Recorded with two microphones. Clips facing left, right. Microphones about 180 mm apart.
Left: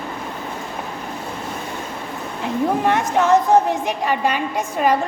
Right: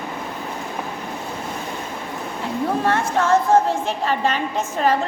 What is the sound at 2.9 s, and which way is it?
A woman's voice, 15° left (ahead or behind).